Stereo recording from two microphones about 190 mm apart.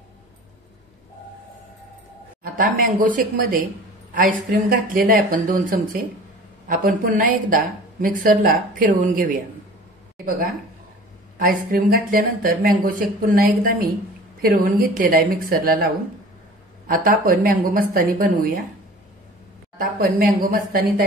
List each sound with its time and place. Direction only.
2.4 s speech: 45° right (ahead or behind)
11.3 s speech: 50° right (ahead or behind)
19.8 s speech: 50° right (ahead or behind)